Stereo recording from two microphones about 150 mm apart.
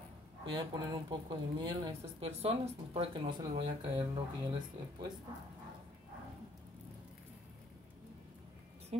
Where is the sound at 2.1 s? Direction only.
40° right (ahead or behind).